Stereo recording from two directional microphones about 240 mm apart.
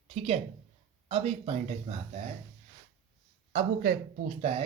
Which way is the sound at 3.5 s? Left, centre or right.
Right.